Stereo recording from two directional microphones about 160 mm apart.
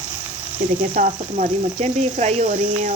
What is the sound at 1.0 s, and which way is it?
Speech, 50° right (ahead or behind).